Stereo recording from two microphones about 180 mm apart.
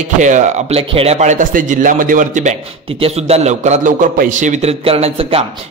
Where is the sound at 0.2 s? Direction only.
45° right (ahead or behind).